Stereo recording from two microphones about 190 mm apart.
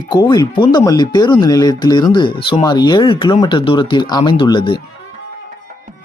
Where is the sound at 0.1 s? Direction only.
25° left (ahead or behind).